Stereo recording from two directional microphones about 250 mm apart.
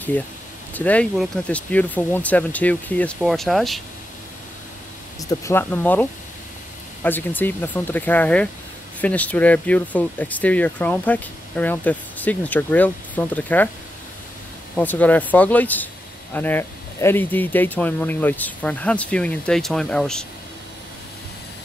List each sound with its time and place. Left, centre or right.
0.7 s speech: centre
5.3 s speech: centre
14.8 s speech: centre